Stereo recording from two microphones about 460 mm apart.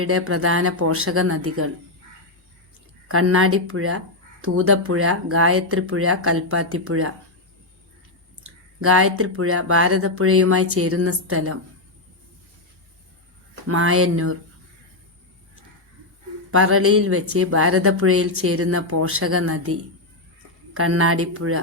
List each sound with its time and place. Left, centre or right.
0.0 s speech: right
3.1 s speech: right
8.4 s speech: right
13.7 s speech: right
16.5 s speech: right
20.7 s speech: right